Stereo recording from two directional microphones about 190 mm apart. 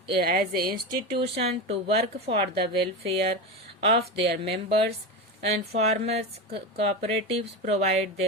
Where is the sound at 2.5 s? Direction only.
55° right (ahead or behind).